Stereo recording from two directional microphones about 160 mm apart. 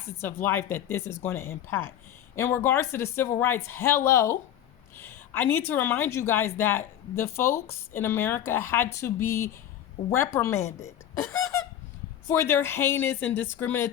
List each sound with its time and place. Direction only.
0.2 s a woman's voice: 15° left (ahead or behind)
10.8 s a sound: 15° left (ahead or behind)
12.3 s a woman's voice: 15° left (ahead or behind)